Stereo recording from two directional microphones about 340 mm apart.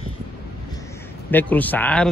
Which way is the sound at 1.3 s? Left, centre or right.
Centre.